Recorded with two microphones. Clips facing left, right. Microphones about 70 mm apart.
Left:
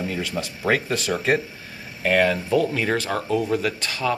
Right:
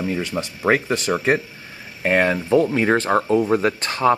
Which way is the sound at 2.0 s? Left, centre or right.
Right.